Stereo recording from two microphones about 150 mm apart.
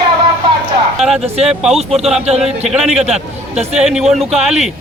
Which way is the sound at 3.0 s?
45° right (ahead or behind).